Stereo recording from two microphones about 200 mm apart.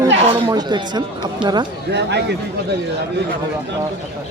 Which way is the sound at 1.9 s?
60° right (ahead or behind).